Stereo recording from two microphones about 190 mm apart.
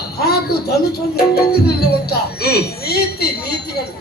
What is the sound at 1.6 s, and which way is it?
Speech, 55° left (ahead or behind).